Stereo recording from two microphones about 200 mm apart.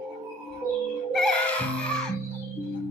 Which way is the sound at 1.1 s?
5° left (ahead or behind).